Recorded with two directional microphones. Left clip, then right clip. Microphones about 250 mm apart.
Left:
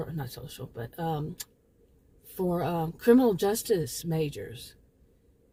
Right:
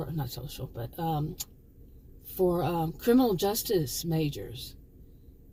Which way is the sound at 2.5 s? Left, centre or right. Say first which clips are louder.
Even; left.